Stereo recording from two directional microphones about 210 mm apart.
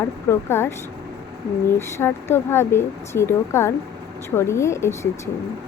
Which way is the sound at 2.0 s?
10° left (ahead or behind).